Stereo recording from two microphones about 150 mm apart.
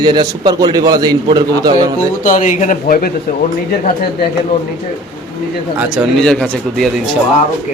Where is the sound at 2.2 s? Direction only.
60° left (ahead or behind).